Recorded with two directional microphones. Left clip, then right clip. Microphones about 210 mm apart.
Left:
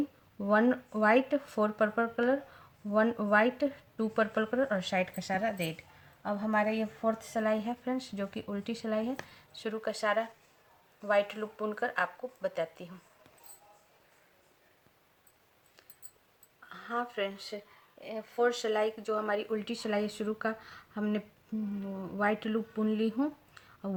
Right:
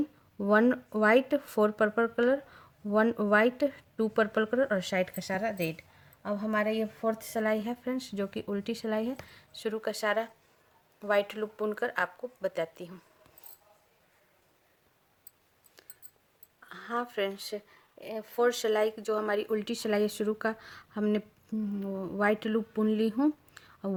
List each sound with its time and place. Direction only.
0.3 s speech: 40° right (ahead or behind)
16.6 s speech: 45° right (ahead or behind)